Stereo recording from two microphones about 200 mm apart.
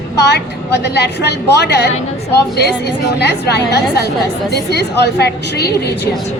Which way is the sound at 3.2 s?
55° left (ahead or behind).